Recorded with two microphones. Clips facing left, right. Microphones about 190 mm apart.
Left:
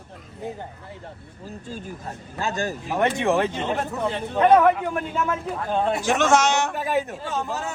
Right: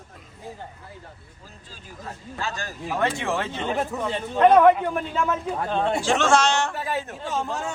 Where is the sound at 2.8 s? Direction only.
20° left (ahead or behind).